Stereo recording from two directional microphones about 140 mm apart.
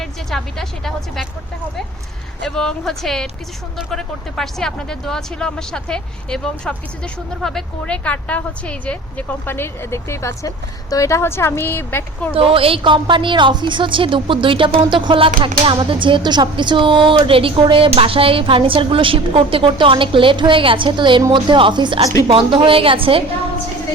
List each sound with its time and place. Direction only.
0.0 s speech: 5° left (ahead or behind)
2.4 s speech: 5° left (ahead or behind)
12.3 s speech: 40° right (ahead or behind)